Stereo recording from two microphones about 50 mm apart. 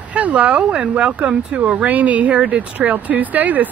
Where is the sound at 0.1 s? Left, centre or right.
Right.